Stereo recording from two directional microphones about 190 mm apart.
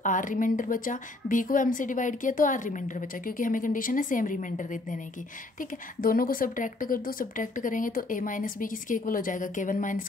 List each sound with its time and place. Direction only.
0.0 s a woman's voice: 45° left (ahead or behind)